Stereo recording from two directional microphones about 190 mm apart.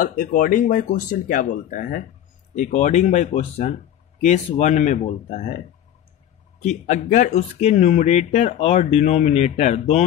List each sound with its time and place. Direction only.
0.0 s speech: 45° left (ahead or behind)
6.6 s speech: 40° left (ahead or behind)